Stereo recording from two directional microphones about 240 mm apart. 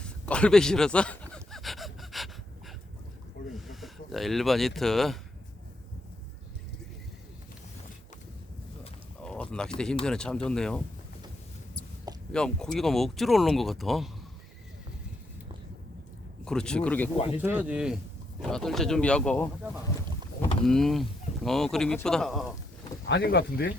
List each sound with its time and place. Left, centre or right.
0.0 s a sound: centre
3.5 s speech: centre
9.2 s speech: centre
12.3 s speech: centre
16.5 s speech: centre
17.3 s speech: centre
20.7 s speech: centre
23.0 s speech: left